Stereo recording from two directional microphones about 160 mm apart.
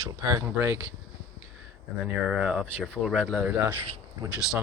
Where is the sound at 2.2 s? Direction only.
5° right (ahead or behind).